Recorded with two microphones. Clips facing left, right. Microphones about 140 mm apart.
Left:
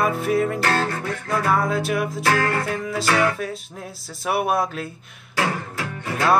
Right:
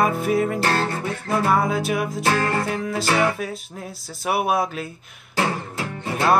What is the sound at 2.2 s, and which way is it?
Music, 25° right (ahead or behind).